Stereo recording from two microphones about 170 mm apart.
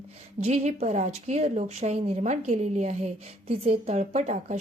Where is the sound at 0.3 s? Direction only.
40° right (ahead or behind).